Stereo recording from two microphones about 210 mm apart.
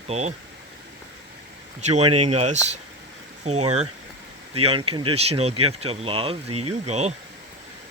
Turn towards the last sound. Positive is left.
turn(degrees=-30)  # may be behind; listen again after turning